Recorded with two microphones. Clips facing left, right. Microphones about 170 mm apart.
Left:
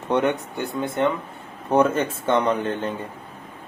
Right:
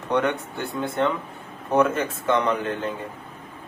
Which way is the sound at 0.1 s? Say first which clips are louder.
Left 2 dB; 20° left (ahead or behind).